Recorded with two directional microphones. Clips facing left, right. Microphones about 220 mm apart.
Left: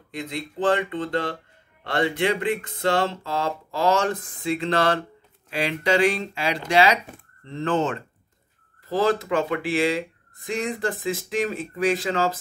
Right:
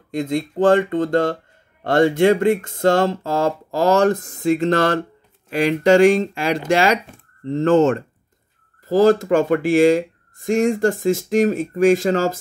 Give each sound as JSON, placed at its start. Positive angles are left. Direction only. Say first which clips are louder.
{"t": 0.1, "sound": "speech", "louder": "right 10 dB", "side_deg": -45}